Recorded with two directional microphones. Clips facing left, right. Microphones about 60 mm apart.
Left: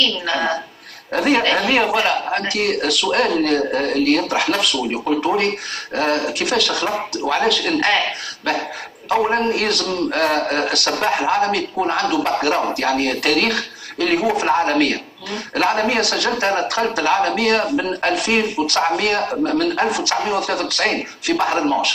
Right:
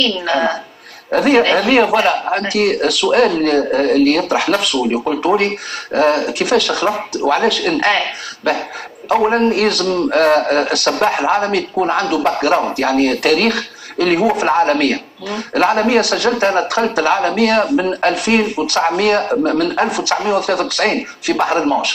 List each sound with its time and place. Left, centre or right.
0.0 s a man's voice: centre
5.9 s a man's voice: centre
9.1 s a man's voice: centre